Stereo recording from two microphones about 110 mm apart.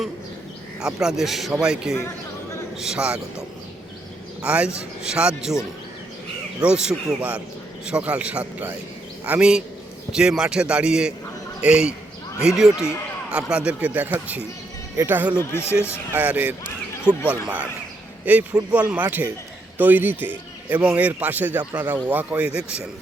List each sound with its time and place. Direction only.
0.8 s a man's voice: 5° right (ahead or behind)
4.4 s speech: 10° right (ahead or behind)
6.6 s speech: 10° right (ahead or behind)
13.3 s speech: 10° right (ahead or behind)
15.4 s speech: 20° left (ahead or behind)
16.1 s speech: 15° right (ahead or behind)
17.1 s speech: 20° left (ahead or behind)
17.4 s speech: 15° right (ahead or behind)